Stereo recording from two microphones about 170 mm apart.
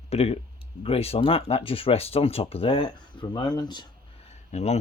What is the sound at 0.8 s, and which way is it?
Speech, 35° left (ahead or behind).